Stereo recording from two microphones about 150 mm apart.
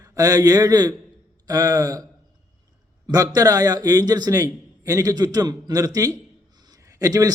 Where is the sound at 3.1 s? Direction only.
25° right (ahead or behind).